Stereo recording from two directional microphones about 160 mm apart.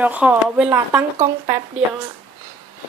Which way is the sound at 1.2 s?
20° right (ahead or behind).